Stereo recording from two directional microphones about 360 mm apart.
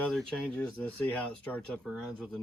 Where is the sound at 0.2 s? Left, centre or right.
Centre.